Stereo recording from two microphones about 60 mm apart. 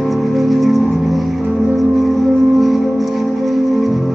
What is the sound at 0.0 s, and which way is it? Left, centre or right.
Music, centre.